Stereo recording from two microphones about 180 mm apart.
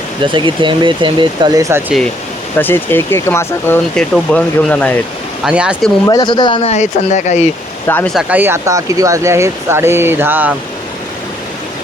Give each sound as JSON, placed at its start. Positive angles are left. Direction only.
{"t": 0.3, "sound": "speech", "side_deg": -25}
{"t": 2.6, "sound": "speech", "side_deg": 10}
{"t": 5.5, "sound": "speech", "side_deg": -5}
{"t": 6.1, "sound": "speech", "side_deg": 25}
{"t": 7.9, "sound": "speech", "side_deg": 10}
{"t": 8.1, "sound": "speech", "side_deg": -10}